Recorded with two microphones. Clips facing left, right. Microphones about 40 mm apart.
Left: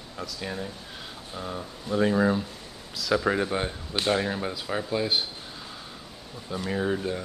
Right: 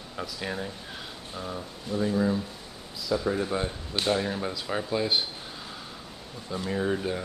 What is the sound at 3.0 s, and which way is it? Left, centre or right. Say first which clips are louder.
Speech: left 3 dB; left.